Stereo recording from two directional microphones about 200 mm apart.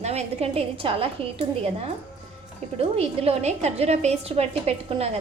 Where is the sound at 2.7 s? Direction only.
30° right (ahead or behind).